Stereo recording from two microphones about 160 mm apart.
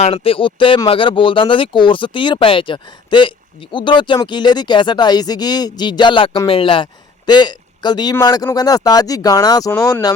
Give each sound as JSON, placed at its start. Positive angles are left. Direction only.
{"t": 0.0, "sound": "a man's voice", "side_deg": 35}